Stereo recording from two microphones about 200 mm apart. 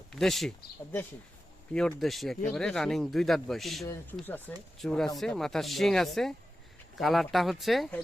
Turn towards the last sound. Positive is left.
turn(degrees=0)  # may be behind; listen again after turning